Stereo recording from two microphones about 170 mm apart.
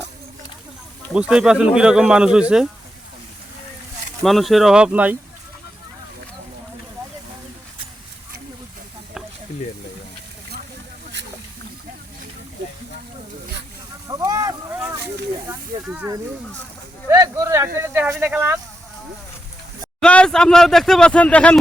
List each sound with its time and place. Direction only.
1.1 s speech: 5° right (ahead or behind)
4.2 s speech: centre (ahead or behind)
14.1 s a sound: 20° right (ahead or behind)
14.7 s vehicle: 10° right (ahead or behind)
15.4 s snake: 10° right (ahead or behind)
17.1 s a sound: 20° right (ahead or behind)
20.0 s speech: 5° left (ahead or behind)